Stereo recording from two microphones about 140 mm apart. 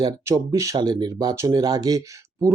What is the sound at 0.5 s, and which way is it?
Speech, 25° right (ahead or behind).